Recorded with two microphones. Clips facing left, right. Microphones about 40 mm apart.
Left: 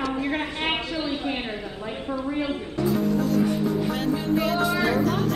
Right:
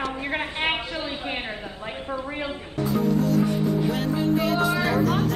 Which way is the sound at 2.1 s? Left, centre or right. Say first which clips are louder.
Left 3 dB; right.